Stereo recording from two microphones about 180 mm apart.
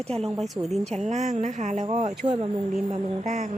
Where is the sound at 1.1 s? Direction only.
40° right (ahead or behind).